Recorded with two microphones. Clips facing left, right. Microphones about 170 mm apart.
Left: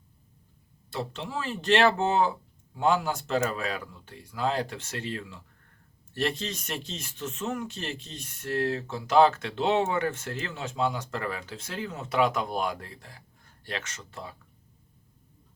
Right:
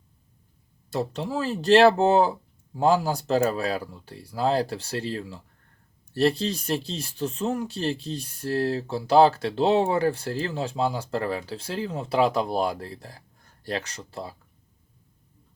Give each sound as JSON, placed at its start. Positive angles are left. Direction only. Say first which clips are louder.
{"t": 0.9, "sound": "speech", "louder": "right 6 dB", "side_deg": -40}